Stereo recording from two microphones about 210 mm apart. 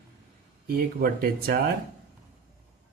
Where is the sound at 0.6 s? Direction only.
45° right (ahead or behind).